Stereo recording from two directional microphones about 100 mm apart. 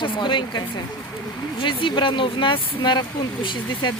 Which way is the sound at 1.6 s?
55° left (ahead or behind).